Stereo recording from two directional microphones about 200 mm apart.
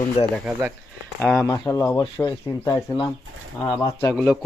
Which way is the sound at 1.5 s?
15° left (ahead or behind).